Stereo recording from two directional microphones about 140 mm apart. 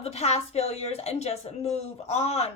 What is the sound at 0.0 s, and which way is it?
A woman's voice, 50° left (ahead or behind).